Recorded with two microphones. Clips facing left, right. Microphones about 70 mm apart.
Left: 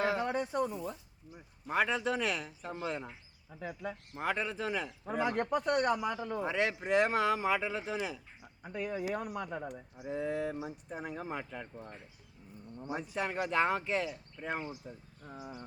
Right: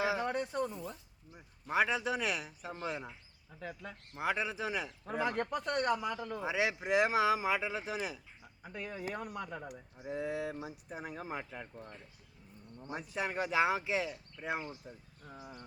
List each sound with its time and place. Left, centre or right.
0.0 s a sound: centre
0.3 s a sound: centre
1.6 s speech: centre
3.5 s speech: centre
4.2 s speech: centre
5.0 s speech: centre
6.4 s speech: centre
8.6 s speech: centre
10.1 s speech: centre
12.7 s speech: centre
13.0 s speech: centre
15.2 s speech: left